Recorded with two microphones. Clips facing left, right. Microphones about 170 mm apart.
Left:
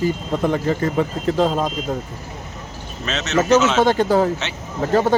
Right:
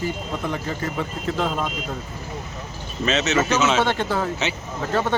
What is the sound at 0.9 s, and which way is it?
Speech, 35° left (ahead or behind).